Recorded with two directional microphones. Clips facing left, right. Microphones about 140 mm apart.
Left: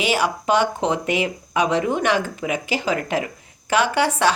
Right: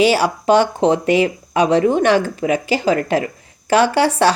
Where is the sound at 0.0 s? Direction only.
35° right (ahead or behind).